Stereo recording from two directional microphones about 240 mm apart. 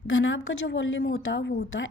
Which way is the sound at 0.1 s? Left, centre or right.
Left.